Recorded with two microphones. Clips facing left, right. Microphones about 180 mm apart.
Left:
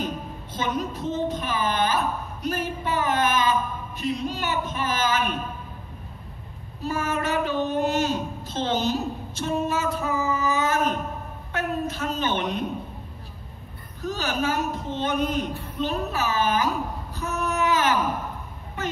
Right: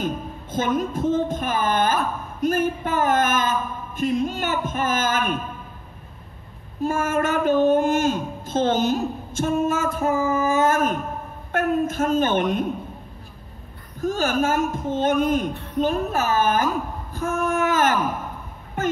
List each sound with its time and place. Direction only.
0.0 s a woman's voice: 50° right (ahead or behind)
6.8 s a woman's voice: 50° right (ahead or behind)
14.0 s a woman's voice: 50° right (ahead or behind)